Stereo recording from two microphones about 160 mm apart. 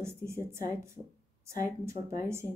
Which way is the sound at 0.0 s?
15° right (ahead or behind).